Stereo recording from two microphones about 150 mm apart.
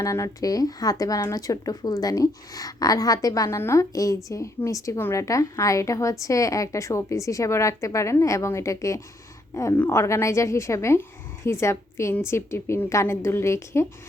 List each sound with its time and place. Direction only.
0.0 s a woman's voice: 20° left (ahead or behind)